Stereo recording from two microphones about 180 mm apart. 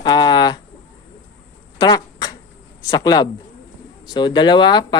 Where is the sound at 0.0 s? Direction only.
25° left (ahead or behind).